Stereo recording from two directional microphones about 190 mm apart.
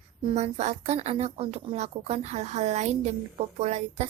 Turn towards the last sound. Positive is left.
turn(degrees=-35)  # may be behind; listen again after turning